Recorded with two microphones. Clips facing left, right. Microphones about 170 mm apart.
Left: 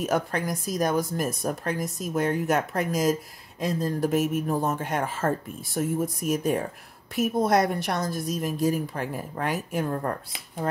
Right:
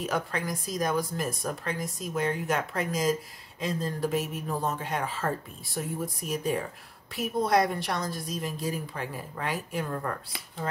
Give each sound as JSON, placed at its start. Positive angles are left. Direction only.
{"t": 0.0, "sound": "speech", "side_deg": 45}